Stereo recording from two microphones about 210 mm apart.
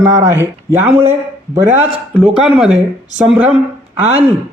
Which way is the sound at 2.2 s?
Centre (ahead or behind).